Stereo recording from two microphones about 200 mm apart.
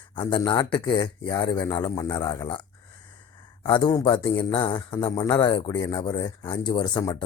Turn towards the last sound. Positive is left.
turn(degrees=20)  # may be behind; listen again after turning